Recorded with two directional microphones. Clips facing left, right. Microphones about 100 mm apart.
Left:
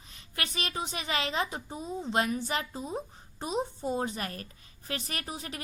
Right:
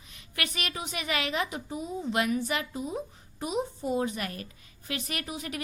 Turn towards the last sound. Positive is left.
turn(degrees=35)  # may be behind; listen again after turning